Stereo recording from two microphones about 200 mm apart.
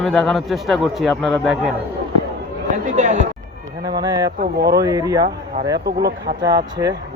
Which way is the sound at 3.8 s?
20° right (ahead or behind).